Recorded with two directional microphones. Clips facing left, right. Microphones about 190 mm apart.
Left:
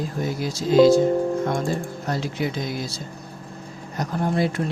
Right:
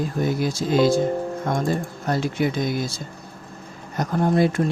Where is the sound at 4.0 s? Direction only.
50° right (ahead or behind).